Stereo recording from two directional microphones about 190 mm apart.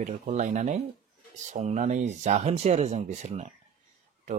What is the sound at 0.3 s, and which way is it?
Speech, 40° right (ahead or behind).